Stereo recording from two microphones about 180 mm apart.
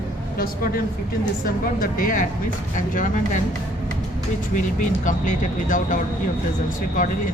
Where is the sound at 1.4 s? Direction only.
50° left (ahead or behind).